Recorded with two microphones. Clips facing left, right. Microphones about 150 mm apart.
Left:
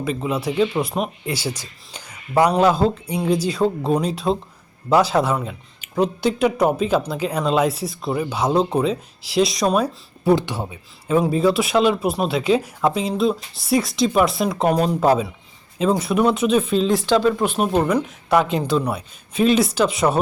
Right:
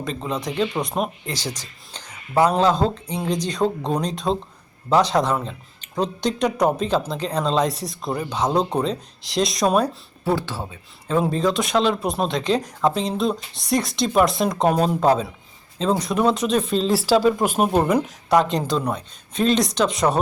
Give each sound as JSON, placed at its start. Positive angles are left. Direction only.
{"t": 0.0, "sound": "speech", "side_deg": 5}
{"t": 10.2, "sound": "speech", "side_deg": 15}
{"t": 17.5, "sound": "speech", "side_deg": -45}
{"t": 17.7, "sound": "speech", "side_deg": -5}